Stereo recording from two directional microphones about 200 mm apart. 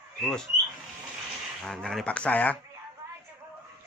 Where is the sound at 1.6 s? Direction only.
5° left (ahead or behind).